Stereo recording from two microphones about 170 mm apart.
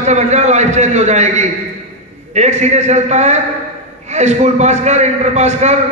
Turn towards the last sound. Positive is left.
turn(degrees=-40)  # may be behind; listen again after turning